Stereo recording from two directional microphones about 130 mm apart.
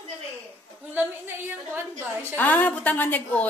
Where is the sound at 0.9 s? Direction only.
15° right (ahead or behind).